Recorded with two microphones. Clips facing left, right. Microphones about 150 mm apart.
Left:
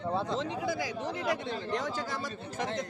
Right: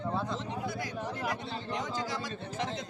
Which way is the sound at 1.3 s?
60° left (ahead or behind).